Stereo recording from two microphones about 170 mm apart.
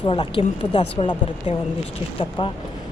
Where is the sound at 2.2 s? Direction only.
30° left (ahead or behind).